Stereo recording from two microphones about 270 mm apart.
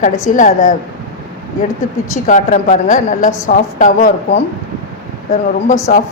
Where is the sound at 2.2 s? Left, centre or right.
Left.